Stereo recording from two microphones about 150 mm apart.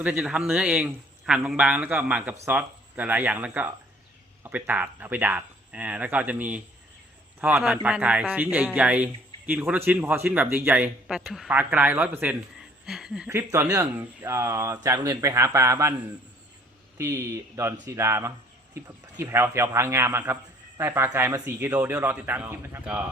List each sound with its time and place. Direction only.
0.0 s speech: 10° right (ahead or behind)
12.8 s a sound: 5° right (ahead or behind)
13.3 s speech: 15° right (ahead or behind)
17.0 s speech: 15° right (ahead or behind)